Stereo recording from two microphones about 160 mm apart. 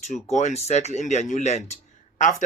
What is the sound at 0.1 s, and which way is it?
Speech, 45° left (ahead or behind).